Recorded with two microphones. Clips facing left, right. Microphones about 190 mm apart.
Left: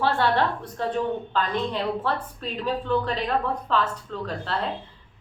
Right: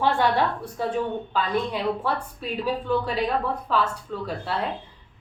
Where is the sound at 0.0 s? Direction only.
10° right (ahead or behind).